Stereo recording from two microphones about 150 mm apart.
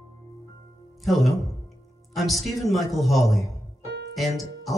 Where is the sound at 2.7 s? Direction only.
Centre (ahead or behind).